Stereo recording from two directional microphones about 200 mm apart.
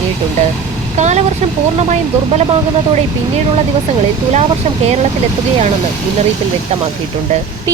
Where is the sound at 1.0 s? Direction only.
35° right (ahead or behind).